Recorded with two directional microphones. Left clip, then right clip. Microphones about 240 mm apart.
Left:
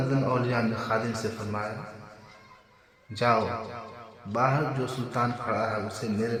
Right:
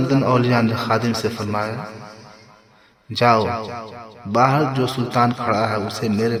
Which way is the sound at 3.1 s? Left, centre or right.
Right.